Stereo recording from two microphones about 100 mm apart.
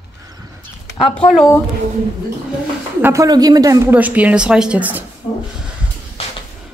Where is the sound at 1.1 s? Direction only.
5° left (ahead or behind).